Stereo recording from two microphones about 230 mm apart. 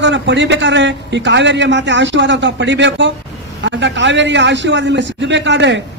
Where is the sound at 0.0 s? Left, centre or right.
Right.